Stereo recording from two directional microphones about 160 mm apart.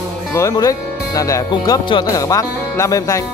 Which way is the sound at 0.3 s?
15° left (ahead or behind).